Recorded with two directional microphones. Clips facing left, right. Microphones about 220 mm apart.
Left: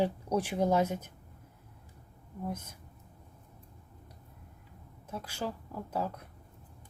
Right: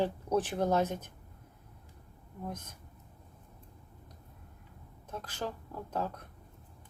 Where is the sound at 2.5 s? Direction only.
10° left (ahead or behind).